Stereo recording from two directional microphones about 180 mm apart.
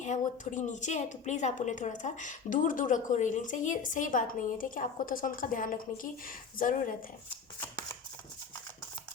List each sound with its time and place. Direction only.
0.0 s a woman's voice: 40° left (ahead or behind)